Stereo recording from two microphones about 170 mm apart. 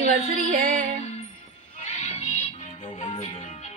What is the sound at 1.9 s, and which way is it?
Music, 45° left (ahead or behind).